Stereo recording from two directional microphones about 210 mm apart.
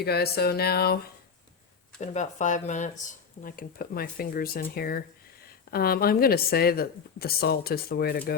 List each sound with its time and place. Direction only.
0.0 s speech: 50° left (ahead or behind)
2.0 s speech: 35° left (ahead or behind)